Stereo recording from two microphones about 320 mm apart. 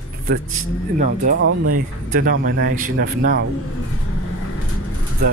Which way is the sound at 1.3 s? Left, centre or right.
Right.